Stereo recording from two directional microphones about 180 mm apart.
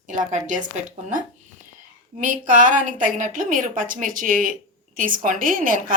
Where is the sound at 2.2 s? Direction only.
45° right (ahead or behind).